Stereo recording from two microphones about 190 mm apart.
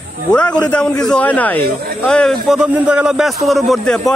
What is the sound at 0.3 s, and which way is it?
Speech, 5° left (ahead or behind).